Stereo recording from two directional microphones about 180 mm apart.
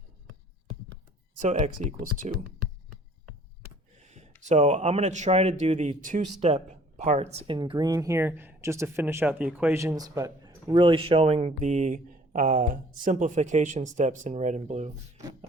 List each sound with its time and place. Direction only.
1.4 s speech: 40° right (ahead or behind)
4.4 s speech: 40° right (ahead or behind)